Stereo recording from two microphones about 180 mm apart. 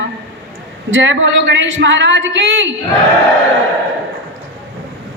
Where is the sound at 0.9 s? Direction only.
90° right.